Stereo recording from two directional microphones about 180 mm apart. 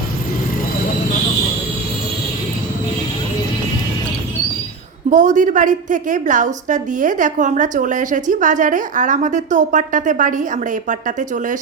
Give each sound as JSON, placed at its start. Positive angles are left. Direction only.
{"t": 5.0, "sound": "a woman's voice", "side_deg": -45}